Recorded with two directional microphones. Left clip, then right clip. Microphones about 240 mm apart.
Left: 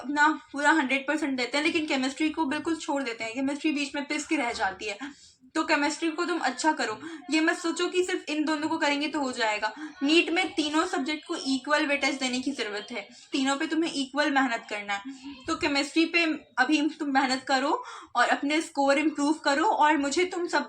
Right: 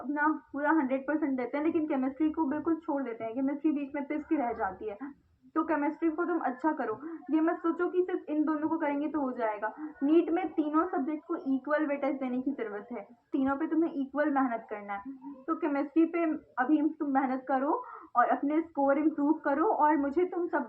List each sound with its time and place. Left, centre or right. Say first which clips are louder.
0.1 s a woman's voice: left 6 dB; left